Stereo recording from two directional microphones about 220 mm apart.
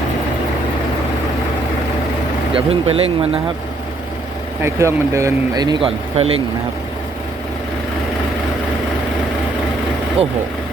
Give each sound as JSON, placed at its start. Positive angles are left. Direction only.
{"t": 2.5, "sound": "speech", "side_deg": -25}
{"t": 4.6, "sound": "speech", "side_deg": -10}